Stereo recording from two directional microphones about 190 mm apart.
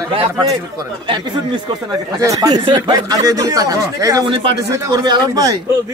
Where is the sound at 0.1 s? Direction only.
30° right (ahead or behind).